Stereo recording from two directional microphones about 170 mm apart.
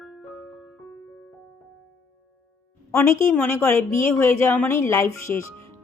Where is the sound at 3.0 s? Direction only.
15° left (ahead or behind).